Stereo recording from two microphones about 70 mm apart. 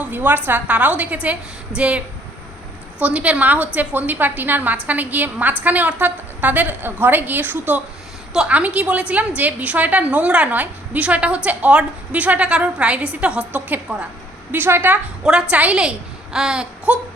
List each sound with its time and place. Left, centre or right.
0.0 s a woman's voice: right
8.3 s a woman's voice: centre
15.2 s a woman's voice: centre